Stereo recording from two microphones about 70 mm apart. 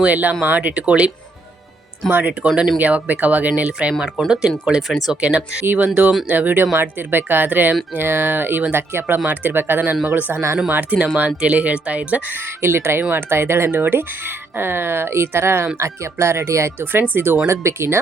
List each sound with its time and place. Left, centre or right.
0.0 s speech: right
5.6 s speech: right
12.6 s speech: right
16.9 s speech: right
17.4 s speech: right